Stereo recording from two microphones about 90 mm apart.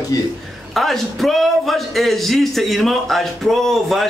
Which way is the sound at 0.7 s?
Centre (ahead or behind).